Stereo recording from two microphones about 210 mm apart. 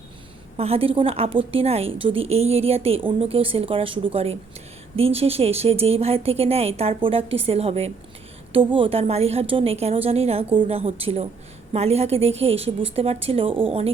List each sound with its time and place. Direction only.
0.5 s a woman's voice: 30° right (ahead or behind)